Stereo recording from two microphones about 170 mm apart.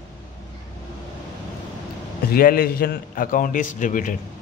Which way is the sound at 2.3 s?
60° left (ahead or behind).